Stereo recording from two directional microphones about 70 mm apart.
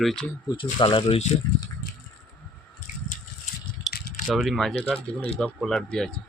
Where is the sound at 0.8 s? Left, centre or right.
Left.